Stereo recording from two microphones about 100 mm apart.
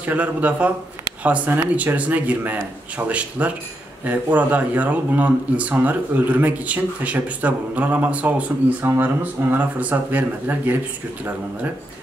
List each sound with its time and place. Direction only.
0.0 s speech: 15° right (ahead or behind)